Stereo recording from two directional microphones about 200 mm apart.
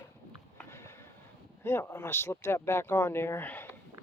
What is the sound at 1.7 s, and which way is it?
Speech, 10° left (ahead or behind).